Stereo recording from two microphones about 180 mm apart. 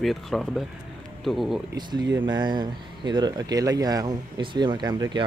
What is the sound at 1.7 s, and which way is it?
Speech, 25° right (ahead or behind).